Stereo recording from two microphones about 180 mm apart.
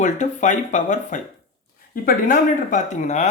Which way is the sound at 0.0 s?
40° left (ahead or behind).